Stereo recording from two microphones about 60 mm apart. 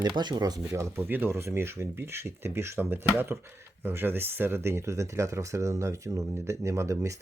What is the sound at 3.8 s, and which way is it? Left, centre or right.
Speech, right.